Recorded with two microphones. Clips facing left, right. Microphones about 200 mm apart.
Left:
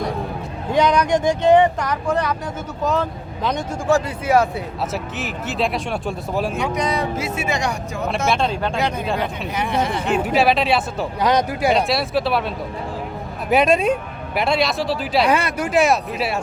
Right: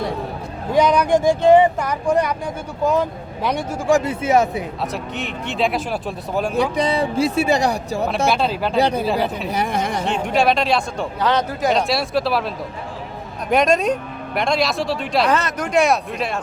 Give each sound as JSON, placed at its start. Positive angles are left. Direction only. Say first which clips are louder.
{"t": 0.7, "sound": "speech", "louder": "right 1 dB", "side_deg": -5}
{"t": 4.0, "sound": "speech", "louder": "right 1 dB", "side_deg": -20}
{"t": 4.9, "sound": "speech", "louder": "even", "side_deg": 5}
{"t": 6.5, "sound": "speech", "louder": "right 3 dB", "side_deg": -35}
{"t": 8.3, "sound": "speech", "louder": "right 1 dB", "side_deg": -5}
{"t": 8.8, "sound": "speech", "louder": "right 8 dB", "side_deg": -35}
{"t": 9.0, "sound": "speech", "louder": "right 3 dB", "side_deg": -5}
{"t": 9.5, "sound": "speech", "louder": "even", "side_deg": -40}
{"t": 10.2, "sound": "speech", "louder": "right 1 dB", "side_deg": 5}
{"t": 13.5, "sound": "speech", "louder": "even", "side_deg": 5}